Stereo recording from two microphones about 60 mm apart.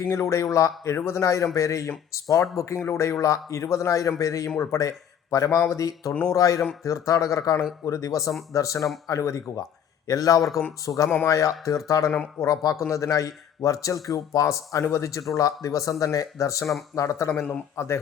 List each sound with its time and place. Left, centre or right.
0.1 s a man's voice: left
0.9 s a man's voice: left
12.9 s a man's voice: left
15.4 s a man's voice: left